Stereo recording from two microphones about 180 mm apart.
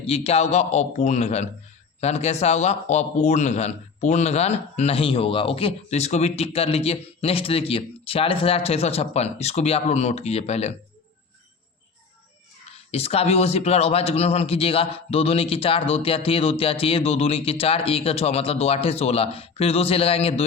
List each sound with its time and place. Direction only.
0.0 s speech: 35° left (ahead or behind)
12.9 s speech: 35° left (ahead or behind)